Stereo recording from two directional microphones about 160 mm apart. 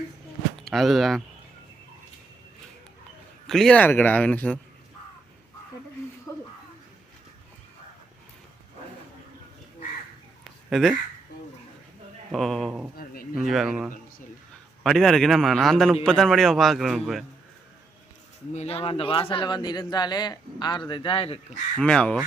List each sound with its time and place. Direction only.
0.5 s speech: centre (ahead or behind)
3.4 s a man's voice: centre (ahead or behind)
10.7 s speech: centre (ahead or behind)
12.3 s a man's voice: centre (ahead or behind)
13.0 s a sound: 65° left (ahead or behind)
13.4 s a man's voice: centre (ahead or behind)
18.5 s a man's voice: 40° left (ahead or behind)
21.8 s a man's voice: 5° left (ahead or behind)